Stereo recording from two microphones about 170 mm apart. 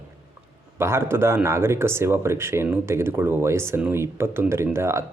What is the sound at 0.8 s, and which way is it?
Speech, 15° right (ahead or behind).